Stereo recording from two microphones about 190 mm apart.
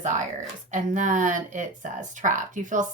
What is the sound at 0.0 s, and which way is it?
Speech, 40° right (ahead or behind).